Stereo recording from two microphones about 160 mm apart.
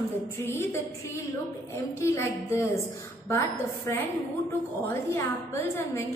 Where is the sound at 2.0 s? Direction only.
20° left (ahead or behind).